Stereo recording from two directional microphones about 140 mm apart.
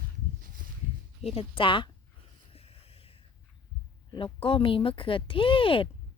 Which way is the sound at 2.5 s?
45° left (ahead or behind).